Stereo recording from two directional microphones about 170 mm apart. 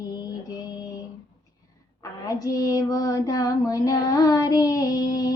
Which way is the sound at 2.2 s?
20° left (ahead or behind).